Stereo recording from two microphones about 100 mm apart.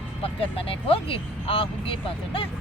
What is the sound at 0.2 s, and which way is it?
Speech, 70° left (ahead or behind).